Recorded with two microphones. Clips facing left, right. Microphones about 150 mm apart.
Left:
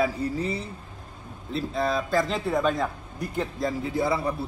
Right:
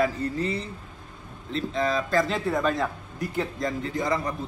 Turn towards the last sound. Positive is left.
turn(degrees=5)  # may be behind; listen again after turning